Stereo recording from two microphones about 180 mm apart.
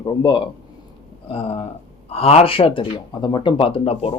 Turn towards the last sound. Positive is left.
turn(degrees=35)  # may be behind; listen again after turning